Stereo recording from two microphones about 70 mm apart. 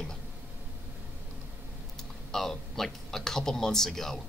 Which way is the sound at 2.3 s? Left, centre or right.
Centre.